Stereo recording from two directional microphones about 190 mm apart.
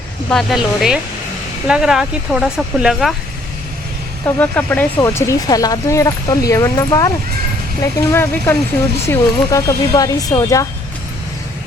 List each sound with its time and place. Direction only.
0.3 s speech: centre (ahead or behind)
4.4 s speech: 10° left (ahead or behind)